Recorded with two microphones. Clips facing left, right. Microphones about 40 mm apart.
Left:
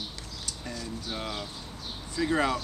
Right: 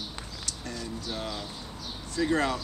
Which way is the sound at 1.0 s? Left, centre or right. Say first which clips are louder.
Left 1 dB; centre.